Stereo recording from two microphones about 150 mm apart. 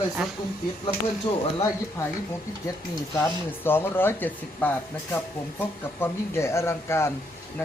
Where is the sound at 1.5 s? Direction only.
25° left (ahead or behind).